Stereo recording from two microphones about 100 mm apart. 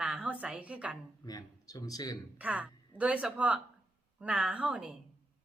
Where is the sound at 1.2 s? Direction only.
40° left (ahead or behind).